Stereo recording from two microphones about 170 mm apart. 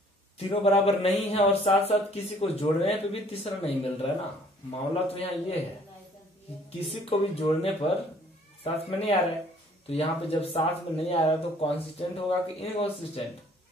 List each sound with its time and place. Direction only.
0.4 s a man's voice: 35° left (ahead or behind)
6.9 s a man's voice: 35° left (ahead or behind)